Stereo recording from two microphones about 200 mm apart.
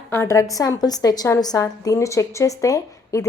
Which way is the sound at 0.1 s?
15° left (ahead or behind).